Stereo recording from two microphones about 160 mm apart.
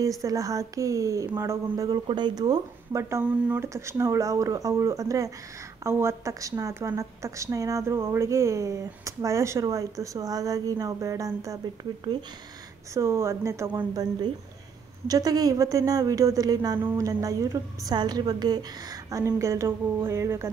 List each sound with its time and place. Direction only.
0.2 s a woman's voice: 20° right (ahead or behind)
12.9 s speech: 15° right (ahead or behind)
15.0 s a woman's voice: 25° right (ahead or behind)